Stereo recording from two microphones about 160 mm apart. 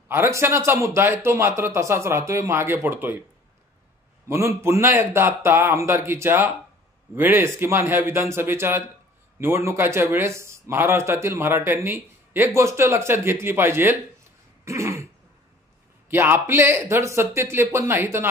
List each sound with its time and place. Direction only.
0.1 s a man's voice: 15° right (ahead or behind)
4.3 s a man's voice: 15° right (ahead or behind)
14.6 s throat clearing: 20° right (ahead or behind)
16.1 s a man's voice: 15° right (ahead or behind)